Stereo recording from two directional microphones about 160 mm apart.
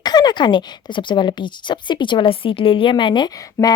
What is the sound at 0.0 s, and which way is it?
Speech, 25° left (ahead or behind).